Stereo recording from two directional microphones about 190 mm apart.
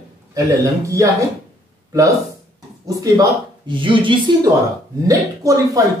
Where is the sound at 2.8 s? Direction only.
20° right (ahead or behind).